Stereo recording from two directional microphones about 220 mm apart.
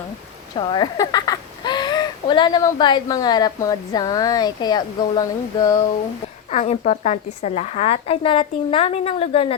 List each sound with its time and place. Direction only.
0.5 s speech: 20° left (ahead or behind)
6.5 s a woman's voice: 30° left (ahead or behind)